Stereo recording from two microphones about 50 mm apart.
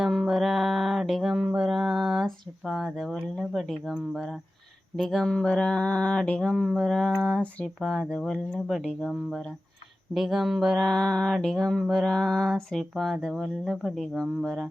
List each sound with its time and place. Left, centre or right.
0.0 s music: centre
1.7 s speech: centre
5.5 s a sound: left
6.4 s speech: centre
10.2 s a sound: centre
10.8 s speech: centre